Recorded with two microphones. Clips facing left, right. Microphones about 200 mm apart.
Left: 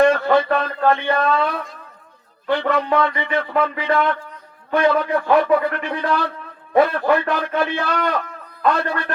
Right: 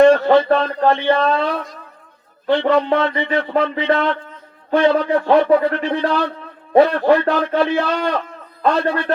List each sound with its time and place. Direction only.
0.0 s a man's voice: 30° right (ahead or behind)